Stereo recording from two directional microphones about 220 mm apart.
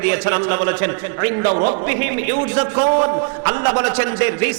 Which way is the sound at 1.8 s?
10° right (ahead or behind).